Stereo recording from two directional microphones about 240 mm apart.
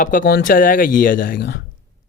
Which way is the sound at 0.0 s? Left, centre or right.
Left.